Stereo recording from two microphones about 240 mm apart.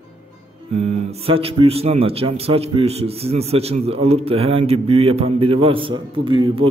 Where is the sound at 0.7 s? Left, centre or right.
Right.